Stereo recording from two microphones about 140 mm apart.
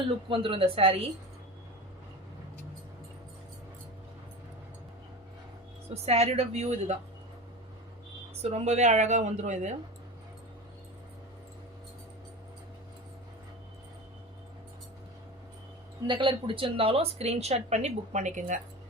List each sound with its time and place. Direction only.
0.3 s a woman's voice: 40° right (ahead or behind)
5.9 s a woman's voice: 50° right (ahead or behind)
8.4 s a woman's voice: 50° right (ahead or behind)
16.0 s a woman's voice: 35° right (ahead or behind); by 18.6 s 60° right (ahead or behind)